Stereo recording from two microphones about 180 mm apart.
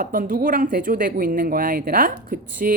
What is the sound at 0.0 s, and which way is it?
Speech, 50° right (ahead or behind).